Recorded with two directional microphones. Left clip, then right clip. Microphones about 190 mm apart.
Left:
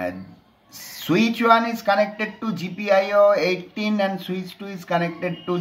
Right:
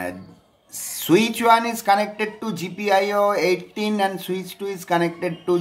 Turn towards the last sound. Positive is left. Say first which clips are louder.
# right 3 dB
turn(degrees=-30)  # may be behind; listen again after turning